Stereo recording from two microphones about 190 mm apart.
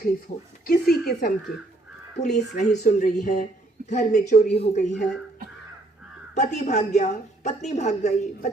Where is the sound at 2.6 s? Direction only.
40° left (ahead or behind).